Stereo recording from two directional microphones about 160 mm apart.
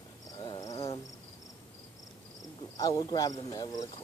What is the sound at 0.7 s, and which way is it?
Cricket, 35° left (ahead or behind).